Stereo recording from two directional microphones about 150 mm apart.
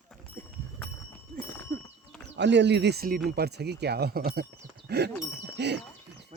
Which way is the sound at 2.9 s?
85° right.